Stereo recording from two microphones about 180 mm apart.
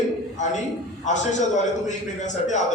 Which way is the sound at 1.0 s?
40° left (ahead or behind).